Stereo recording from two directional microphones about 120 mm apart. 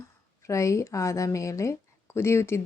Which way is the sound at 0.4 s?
25° left (ahead or behind).